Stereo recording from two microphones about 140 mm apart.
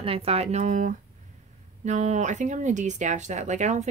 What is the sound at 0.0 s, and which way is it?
Speech, 45° right (ahead or behind).